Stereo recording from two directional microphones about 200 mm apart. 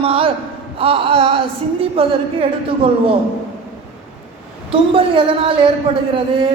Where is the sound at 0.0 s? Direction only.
25° right (ahead or behind).